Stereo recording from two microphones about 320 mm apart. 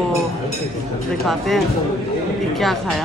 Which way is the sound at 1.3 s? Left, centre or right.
Centre.